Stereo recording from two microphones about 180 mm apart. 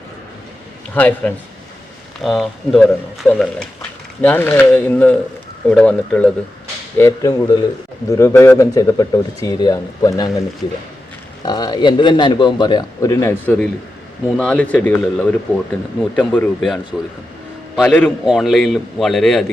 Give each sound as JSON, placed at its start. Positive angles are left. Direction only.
{"t": 0.9, "sound": "speech", "side_deg": 10}
{"t": 6.9, "sound": "a man's voice", "side_deg": 15}
{"t": 11.4, "sound": "a man's voice", "side_deg": 25}